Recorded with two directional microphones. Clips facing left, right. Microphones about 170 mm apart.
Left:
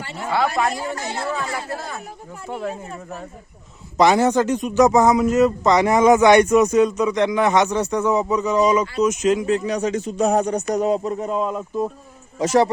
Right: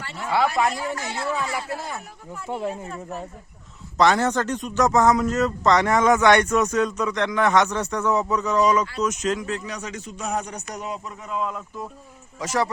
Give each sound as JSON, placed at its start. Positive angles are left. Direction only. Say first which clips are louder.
{"t": 0.0, "sound": "a man's voice", "louder": "left 2 dB", "side_deg": 20}
{"t": 0.3, "sound": "a man's voice", "louder": "left 1 dB", "side_deg": -15}
{"t": 0.9, "sound": "speech", "louder": "left 2 dB", "side_deg": 35}
{"t": 2.5, "sound": "speech", "louder": "even", "side_deg": -20}
{"t": 3.9, "sound": "a man's voice", "louder": "left 4 dB", "side_deg": 10}